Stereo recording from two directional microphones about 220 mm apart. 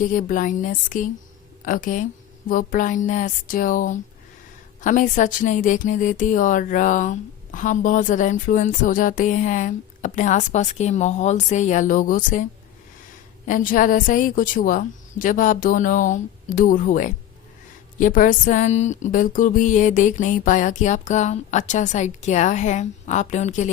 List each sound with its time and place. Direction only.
0.0 s speech: 40° left (ahead or behind)
13.5 s speech: 35° left (ahead or behind)